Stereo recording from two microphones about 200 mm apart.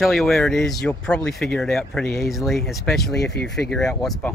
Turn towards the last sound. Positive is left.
turn(degrees=5)  # may be behind; listen again after turning